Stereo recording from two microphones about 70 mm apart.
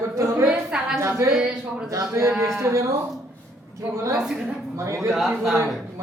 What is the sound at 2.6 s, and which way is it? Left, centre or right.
Speech, right.